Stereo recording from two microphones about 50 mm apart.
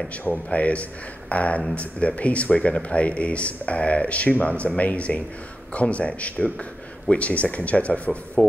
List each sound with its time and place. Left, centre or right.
0.1 s speech: left